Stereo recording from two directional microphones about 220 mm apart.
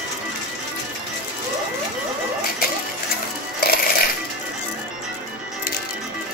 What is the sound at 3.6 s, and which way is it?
Coin, 45° left (ahead or behind).